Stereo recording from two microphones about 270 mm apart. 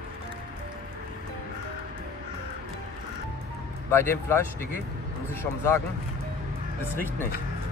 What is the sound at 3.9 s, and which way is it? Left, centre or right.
Speech, centre.